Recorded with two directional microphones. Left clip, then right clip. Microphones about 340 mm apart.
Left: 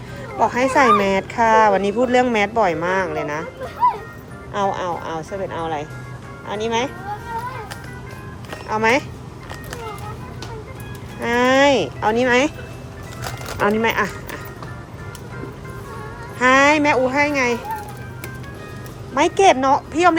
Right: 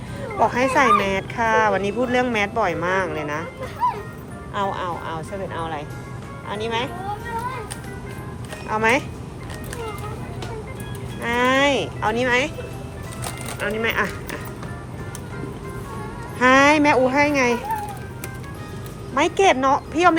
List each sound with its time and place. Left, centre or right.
0.3 s speech: centre
4.5 s speech: centre
8.7 s speech: centre
11.2 s speech: centre
13.2 s music: centre
16.4 s speech: centre
19.1 s speech: centre